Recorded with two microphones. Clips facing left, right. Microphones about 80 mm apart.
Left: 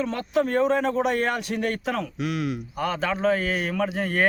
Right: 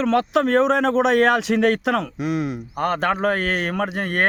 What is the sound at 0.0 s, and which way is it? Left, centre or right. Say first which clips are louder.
A man's voice: right 6 dB; right.